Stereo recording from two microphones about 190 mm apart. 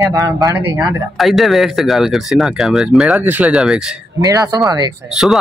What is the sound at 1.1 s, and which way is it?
Speech, centre (ahead or behind).